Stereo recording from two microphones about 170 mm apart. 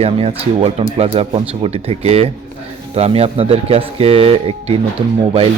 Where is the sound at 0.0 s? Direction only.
35° right (ahead or behind).